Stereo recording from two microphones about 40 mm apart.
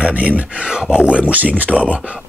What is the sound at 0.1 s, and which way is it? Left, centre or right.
Speech, right.